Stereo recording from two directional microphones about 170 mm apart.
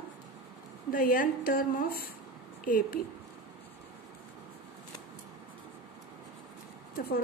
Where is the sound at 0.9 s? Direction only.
55° left (ahead or behind).